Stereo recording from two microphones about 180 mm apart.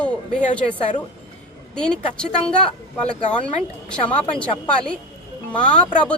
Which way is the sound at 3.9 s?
5° left (ahead or behind).